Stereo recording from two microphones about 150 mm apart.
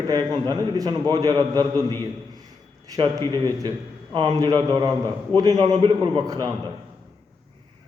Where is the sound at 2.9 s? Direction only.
30° right (ahead or behind).